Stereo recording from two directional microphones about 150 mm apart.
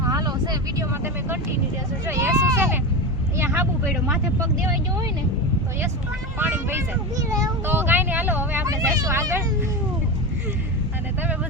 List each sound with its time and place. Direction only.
0.0 s vehicle: 25° right (ahead or behind)
2.0 s speech: 20° right (ahead or behind)
6.4 s speech: 15° right (ahead or behind)